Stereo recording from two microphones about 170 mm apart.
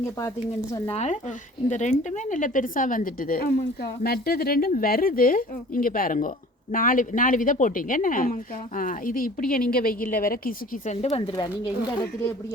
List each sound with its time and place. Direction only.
0.9 s speech: 40° left (ahead or behind); by 10.9 s 55° left (ahead or behind)
10.9 s speech: 40° left (ahead or behind)